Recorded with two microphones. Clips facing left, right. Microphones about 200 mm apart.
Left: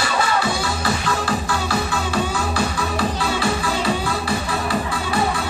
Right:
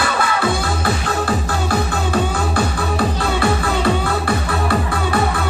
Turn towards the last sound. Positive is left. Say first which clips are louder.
# right 3 dB
turn(degrees=-55)  # may be behind; listen again after turning